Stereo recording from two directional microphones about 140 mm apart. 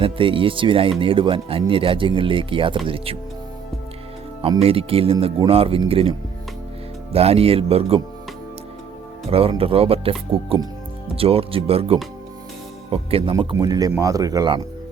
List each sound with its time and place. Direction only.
0.0 s speech: 40° right (ahead or behind)
4.4 s speech: 40° right (ahead or behind)
9.3 s speech: 40° right (ahead or behind)
13.4 s speech: 35° right (ahead or behind)